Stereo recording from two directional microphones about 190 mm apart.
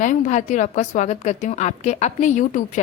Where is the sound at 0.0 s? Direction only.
45° left (ahead or behind).